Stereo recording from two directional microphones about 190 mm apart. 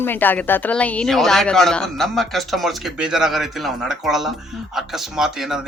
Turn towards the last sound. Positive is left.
turn(degrees=-5)  # may be behind; listen again after turning